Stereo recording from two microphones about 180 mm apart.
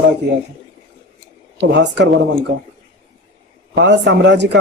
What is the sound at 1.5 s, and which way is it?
Speech, 75° right (ahead or behind).